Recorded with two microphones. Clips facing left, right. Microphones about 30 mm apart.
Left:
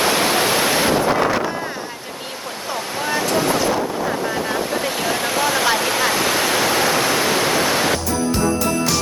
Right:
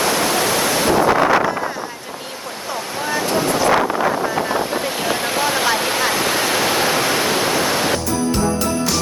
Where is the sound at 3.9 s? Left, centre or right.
Right.